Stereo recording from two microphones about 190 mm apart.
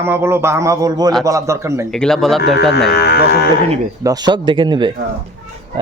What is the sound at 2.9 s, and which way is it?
Speech, 60° left (ahead or behind).